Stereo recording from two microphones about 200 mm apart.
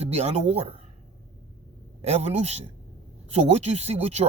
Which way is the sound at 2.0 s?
30° right (ahead or behind).